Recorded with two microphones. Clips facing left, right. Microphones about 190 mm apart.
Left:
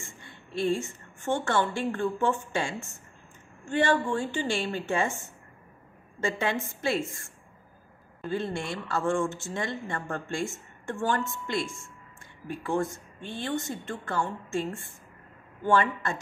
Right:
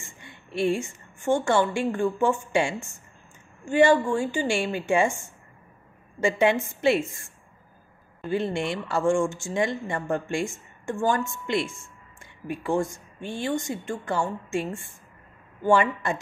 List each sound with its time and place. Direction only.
0.2 s a woman's voice: 15° right (ahead or behind)
8.3 s speech: 20° right (ahead or behind)